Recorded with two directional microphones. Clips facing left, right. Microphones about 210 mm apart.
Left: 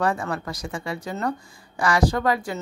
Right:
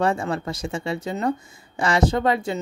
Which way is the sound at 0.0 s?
25° right (ahead or behind).